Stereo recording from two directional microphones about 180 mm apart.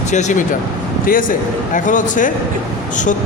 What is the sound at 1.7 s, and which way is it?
Speech, 45° left (ahead or behind).